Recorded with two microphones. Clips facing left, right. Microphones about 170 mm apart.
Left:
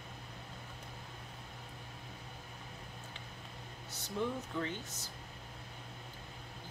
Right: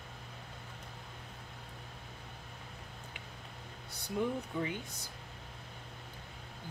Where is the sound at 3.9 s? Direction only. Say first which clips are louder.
Right 3 dB; 10° right (ahead or behind).